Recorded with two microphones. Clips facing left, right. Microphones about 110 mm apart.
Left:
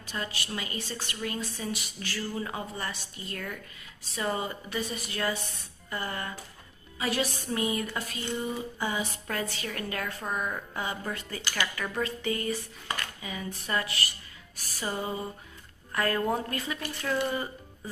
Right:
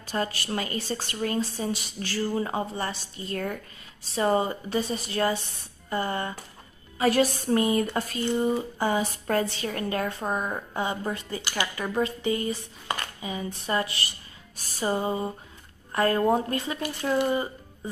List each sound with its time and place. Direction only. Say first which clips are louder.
0.0 s speech: right 7 dB; 40° right (ahead or behind)
7.0 s speech: right 8 dB; 45° right (ahead or behind); by 17.5 s 25° right (ahead or behind)